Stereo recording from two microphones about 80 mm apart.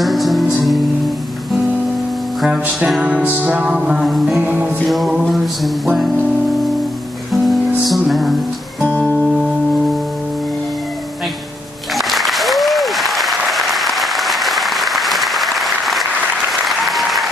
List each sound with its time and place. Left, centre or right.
0.0 s music: centre
2.4 s music: centre
3.7 s music: centre
4.4 s music: centre
4.8 s music: centre
7.4 s music: centre
9.2 s singing bowl: centre
11.9 s applause: centre